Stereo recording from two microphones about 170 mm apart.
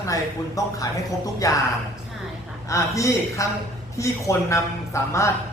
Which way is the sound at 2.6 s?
20° left (ahead or behind).